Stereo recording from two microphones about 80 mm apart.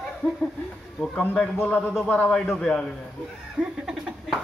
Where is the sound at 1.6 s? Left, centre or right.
Left.